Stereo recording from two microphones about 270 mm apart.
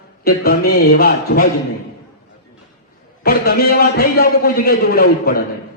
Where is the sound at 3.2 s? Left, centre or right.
Left.